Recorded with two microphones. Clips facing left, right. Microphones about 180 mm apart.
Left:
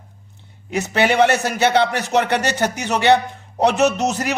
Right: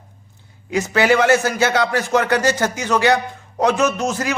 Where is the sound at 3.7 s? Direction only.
70° left (ahead or behind).